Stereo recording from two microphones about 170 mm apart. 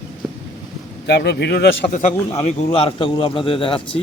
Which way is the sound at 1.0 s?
80° left.